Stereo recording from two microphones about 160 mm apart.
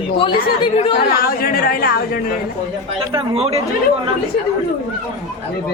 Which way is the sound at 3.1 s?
40° right (ahead or behind).